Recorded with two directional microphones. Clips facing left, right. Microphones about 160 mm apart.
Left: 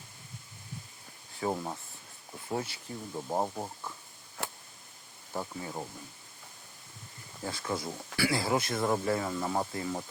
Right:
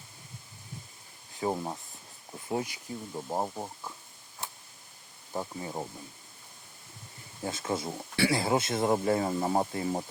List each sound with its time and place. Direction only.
1.4 s speech: 10° right (ahead or behind)
3.2 s speech: centre (ahead or behind)
4.4 s a sound: 80° left
5.3 s speech: 15° right (ahead or behind)
7.4 s speech: 25° right (ahead or behind)